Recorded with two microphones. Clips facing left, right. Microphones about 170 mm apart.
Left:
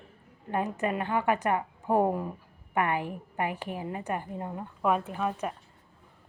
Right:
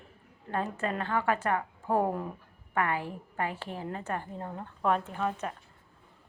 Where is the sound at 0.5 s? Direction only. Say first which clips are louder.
Left 3 dB; 15° left (ahead or behind).